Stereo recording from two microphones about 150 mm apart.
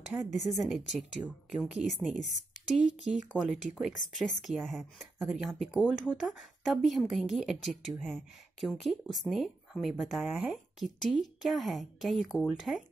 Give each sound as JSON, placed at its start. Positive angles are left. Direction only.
{"t": 0.5, "sound": "speech", "side_deg": 0}
{"t": 1.2, "sound": "speech", "side_deg": -20}
{"t": 1.6, "sound": "speech", "side_deg": 0}
{"t": 2.7, "sound": "speech", "side_deg": -55}
{"t": 3.3, "sound": "speech", "side_deg": -5}